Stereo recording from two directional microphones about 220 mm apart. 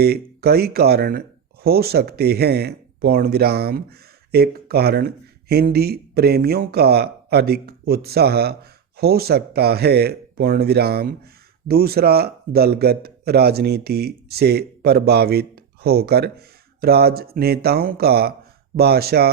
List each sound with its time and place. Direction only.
0.0 s speech: 45° right (ahead or behind)